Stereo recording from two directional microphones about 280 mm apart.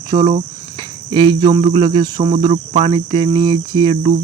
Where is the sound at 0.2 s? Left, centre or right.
Right.